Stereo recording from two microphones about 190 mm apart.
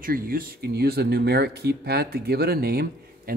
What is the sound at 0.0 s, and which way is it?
A man's voice, 50° right (ahead or behind).